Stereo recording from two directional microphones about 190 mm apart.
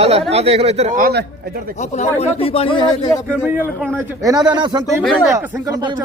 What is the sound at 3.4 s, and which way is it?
A man's voice, 10° right (ahead or behind).